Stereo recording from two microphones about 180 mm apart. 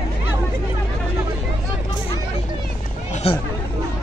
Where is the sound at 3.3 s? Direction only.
35° left (ahead or behind).